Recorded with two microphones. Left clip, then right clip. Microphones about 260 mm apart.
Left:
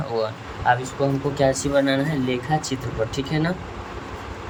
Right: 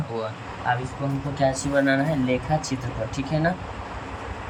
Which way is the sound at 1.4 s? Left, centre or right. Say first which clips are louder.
Left 2 dB; centre.